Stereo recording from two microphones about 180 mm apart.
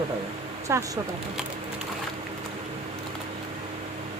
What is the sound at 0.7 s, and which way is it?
Speech, 15° right (ahead or behind).